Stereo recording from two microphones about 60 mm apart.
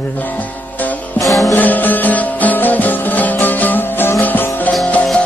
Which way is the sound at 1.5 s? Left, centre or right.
Left.